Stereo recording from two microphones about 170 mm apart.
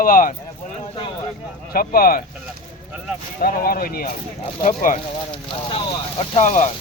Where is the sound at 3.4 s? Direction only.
60° left (ahead or behind).